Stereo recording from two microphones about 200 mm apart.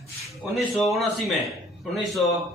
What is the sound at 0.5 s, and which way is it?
A man's voice, centre (ahead or behind).